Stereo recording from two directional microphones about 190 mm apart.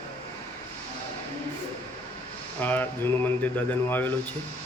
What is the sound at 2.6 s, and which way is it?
A man's voice, 10° left (ahead or behind).